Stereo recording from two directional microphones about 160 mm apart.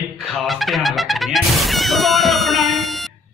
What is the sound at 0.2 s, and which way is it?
Music, centre (ahead or behind).